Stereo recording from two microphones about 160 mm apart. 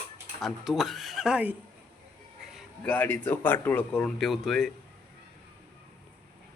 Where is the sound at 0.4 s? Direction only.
Centre (ahead or behind).